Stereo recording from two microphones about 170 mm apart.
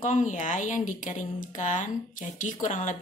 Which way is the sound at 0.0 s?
45° left (ahead or behind).